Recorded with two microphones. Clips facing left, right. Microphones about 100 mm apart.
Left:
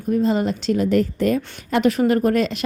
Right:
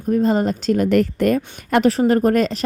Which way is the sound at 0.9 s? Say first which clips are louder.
Right 2 dB; 60° right (ahead or behind).